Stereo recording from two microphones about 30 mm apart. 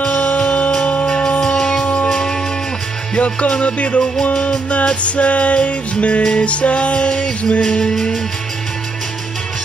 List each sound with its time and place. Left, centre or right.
0.0 s music: left
1.0 s a sound: left
1.4 s music: left
3.2 s music: left
5.0 s music: left
7.1 s music: left